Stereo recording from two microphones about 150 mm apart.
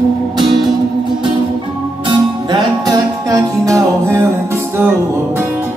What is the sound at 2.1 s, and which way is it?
Music, 30° right (ahead or behind).